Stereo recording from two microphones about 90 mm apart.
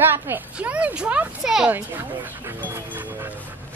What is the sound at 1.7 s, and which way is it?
Speech, 20° right (ahead or behind).